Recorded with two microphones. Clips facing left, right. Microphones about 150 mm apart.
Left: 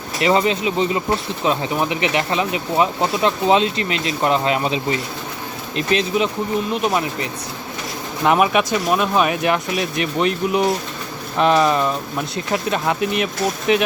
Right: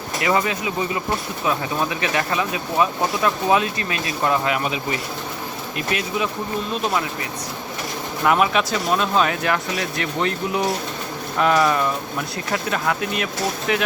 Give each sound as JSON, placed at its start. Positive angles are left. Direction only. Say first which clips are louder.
{"t": 0.2, "sound": "speech", "louder": "left 4 dB", "side_deg": 25}